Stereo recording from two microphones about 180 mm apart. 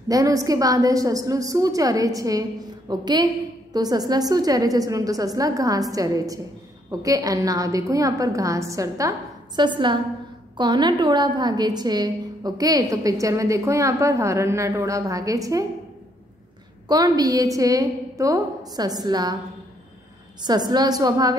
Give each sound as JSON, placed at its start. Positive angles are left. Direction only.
{"t": 0.1, "sound": "a woman's voice", "side_deg": -20}
{"t": 16.8, "sound": "a woman's voice", "side_deg": -20}
{"t": 20.4, "sound": "a woman's voice", "side_deg": -20}